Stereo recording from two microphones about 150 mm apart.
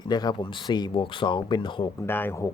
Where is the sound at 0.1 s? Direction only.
30° left (ahead or behind).